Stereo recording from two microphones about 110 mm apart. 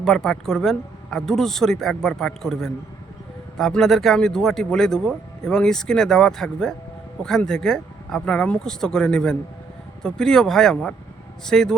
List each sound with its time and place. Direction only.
0.0 s speech: 5° left (ahead or behind)